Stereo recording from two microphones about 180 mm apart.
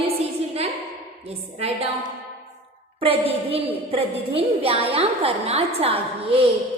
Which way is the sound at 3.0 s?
30° right (ahead or behind).